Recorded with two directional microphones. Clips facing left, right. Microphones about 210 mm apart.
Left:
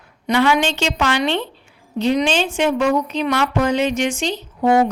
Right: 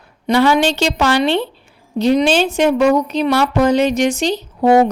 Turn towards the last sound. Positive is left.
turn(degrees=-40)  # may be behind; listen again after turning